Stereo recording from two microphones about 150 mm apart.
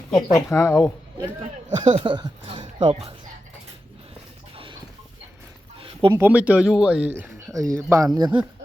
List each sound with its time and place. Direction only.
0.1 s speech: centre (ahead or behind)
0.3 s speech: 20° left (ahead or behind)
1.7 s speech: 35° right (ahead or behind)
4.5 s a sound: 35° right (ahead or behind)
5.8 s a sound: 35° right (ahead or behind)
6.1 s speech: 10° right (ahead or behind)